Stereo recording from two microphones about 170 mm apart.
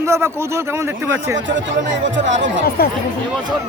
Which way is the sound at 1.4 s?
90° right.